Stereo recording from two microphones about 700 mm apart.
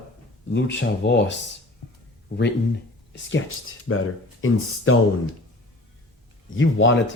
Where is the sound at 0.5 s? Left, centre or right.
Centre.